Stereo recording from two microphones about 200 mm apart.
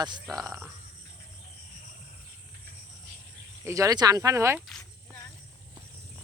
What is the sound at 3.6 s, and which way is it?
Speech, 15° right (ahead or behind).